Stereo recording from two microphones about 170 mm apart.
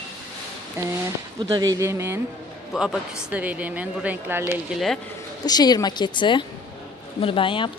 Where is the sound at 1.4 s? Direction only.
20° right (ahead or behind).